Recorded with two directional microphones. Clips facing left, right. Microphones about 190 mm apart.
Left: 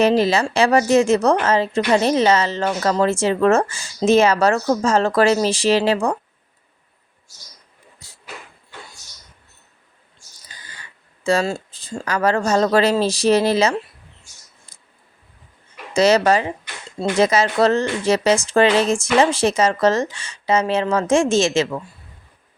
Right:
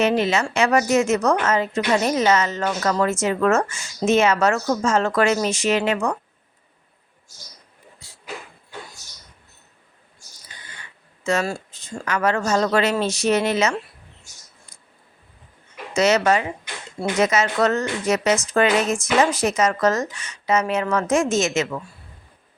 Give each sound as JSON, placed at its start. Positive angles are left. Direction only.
{"t": 0.0, "sound": "a woman's voice", "side_deg": 35}
{"t": 8.0, "sound": "dog", "side_deg": 45}
{"t": 10.7, "sound": "speech", "side_deg": 35}
{"t": 14.7, "sound": "a sound", "side_deg": 30}
{"t": 15.9, "sound": "a woman's voice", "side_deg": 35}